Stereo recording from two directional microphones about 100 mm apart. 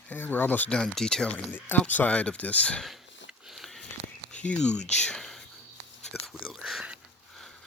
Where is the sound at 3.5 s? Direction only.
Centre (ahead or behind).